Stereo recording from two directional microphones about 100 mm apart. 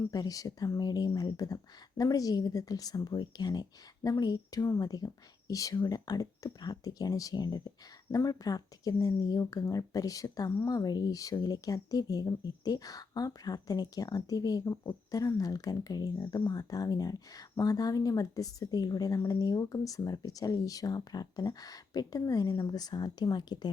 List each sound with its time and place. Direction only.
0.1 s speech: 40° left (ahead or behind)